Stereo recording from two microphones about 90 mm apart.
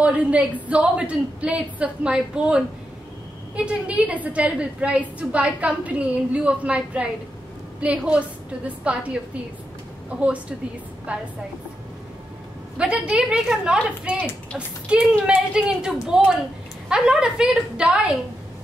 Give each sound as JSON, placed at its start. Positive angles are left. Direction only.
{"t": 0.0, "sound": "a woman's voice", "side_deg": -15}
{"t": 11.1, "sound": "a woman's voice", "side_deg": -15}
{"t": 12.7, "sound": "a woman's voice", "side_deg": -10}